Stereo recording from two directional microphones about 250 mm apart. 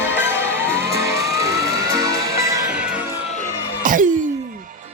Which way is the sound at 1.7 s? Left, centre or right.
Centre.